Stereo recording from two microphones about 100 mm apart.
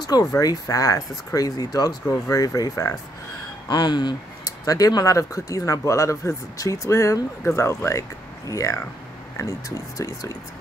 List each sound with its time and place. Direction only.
0.0 s speech: 40° left (ahead or behind)
3.6 s speech: 45° left (ahead or behind)
4.5 s speech: 35° left (ahead or behind)